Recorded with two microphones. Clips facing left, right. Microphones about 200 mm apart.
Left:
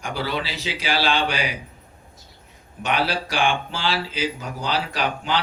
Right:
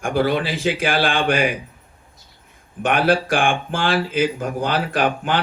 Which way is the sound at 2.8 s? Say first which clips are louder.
Right 6 dB; 50° right (ahead or behind).